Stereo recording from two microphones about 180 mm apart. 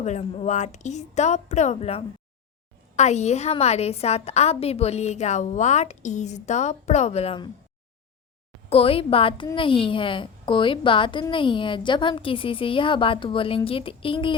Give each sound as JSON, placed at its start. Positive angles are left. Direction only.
{"t": 0.0, "sound": "a woman's voice", "side_deg": 40}
{"t": 8.7, "sound": "a woman's voice", "side_deg": 30}